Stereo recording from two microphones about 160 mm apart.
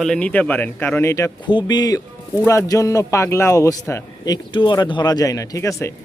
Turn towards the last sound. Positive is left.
turn(degrees=20)  # may be behind; listen again after turning